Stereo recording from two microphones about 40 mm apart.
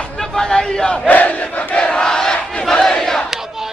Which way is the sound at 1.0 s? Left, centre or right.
Left.